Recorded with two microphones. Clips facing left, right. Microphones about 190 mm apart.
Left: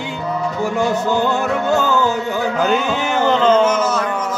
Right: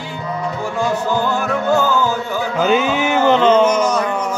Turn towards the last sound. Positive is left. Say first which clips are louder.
# right 1 dB
turn(degrees=-15)  # may be behind; listen again after turning